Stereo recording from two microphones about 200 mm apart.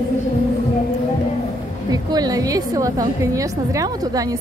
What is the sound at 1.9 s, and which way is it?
A woman's voice, 20° right (ahead or behind).